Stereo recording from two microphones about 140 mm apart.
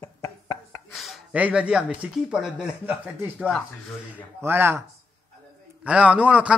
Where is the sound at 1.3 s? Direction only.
10° right (ahead or behind).